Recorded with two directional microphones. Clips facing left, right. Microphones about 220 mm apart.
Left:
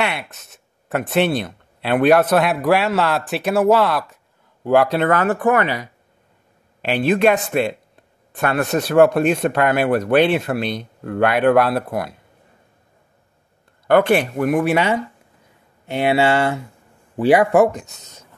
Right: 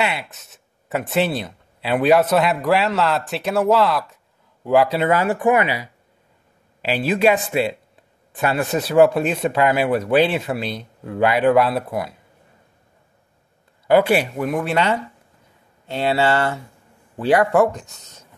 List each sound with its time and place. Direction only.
0.0 s speech: centre (ahead or behind)
6.9 s speech: 5° right (ahead or behind)
13.8 s speech: 10° right (ahead or behind)
14.5 s speech: 10° left (ahead or behind)